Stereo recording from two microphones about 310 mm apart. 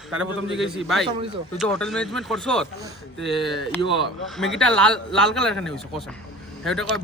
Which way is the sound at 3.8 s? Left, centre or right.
Centre.